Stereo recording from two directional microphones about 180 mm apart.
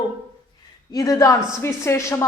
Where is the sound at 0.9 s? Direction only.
20° left (ahead or behind).